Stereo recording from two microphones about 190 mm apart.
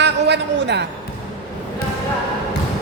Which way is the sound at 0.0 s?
65° right (ahead or behind).